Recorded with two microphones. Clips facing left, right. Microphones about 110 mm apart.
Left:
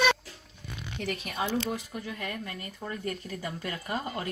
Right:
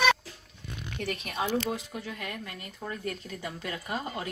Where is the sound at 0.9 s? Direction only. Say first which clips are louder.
Even; 15° left (ahead or behind).